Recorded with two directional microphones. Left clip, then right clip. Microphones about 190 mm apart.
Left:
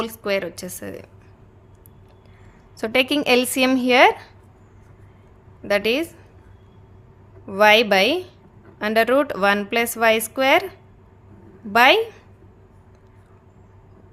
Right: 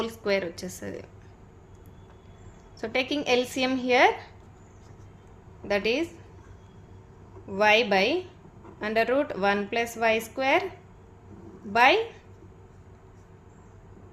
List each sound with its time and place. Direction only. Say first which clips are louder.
0.0 s a woman's voice: left 4 dB; 30° left (ahead or behind)
2.7 s a woman's voice: left 8 dB; 40° left (ahead or behind)
5.6 s a woman's voice: left 6 dB; 35° left (ahead or behind)
7.4 s a woman's voice: left 7 dB; 40° left (ahead or behind)
11.7 s a woman's voice: left 6 dB; 35° left (ahead or behind)